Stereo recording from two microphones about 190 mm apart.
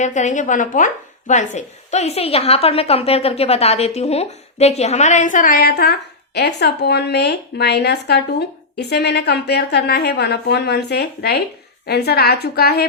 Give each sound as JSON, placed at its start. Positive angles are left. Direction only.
{"t": 0.0, "sound": "a woman's voice", "side_deg": 40}